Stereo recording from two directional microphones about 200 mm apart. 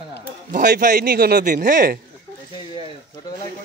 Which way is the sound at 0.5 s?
45° right (ahead or behind).